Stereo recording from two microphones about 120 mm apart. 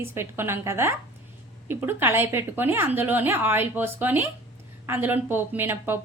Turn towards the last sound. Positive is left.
turn(degrees=-15)  # may be behind; listen again after turning